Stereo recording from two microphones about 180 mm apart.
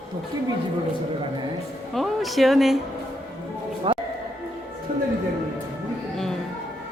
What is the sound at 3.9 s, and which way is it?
Music, 30° right (ahead or behind).